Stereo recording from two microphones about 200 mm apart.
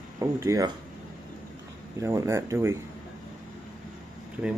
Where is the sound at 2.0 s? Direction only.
15° right (ahead or behind).